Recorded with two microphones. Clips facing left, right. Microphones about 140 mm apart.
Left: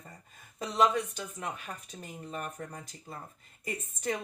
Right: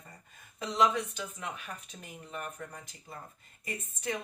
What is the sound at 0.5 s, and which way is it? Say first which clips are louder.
Speech: left 1 dB; 40° left (ahead or behind).